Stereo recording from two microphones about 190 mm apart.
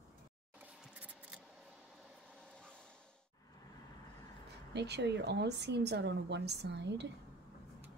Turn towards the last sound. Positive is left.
turn(degrees=-65)  # may be behind; listen again after turning